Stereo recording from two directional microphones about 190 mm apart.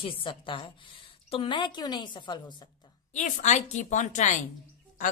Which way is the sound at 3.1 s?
40° left (ahead or behind).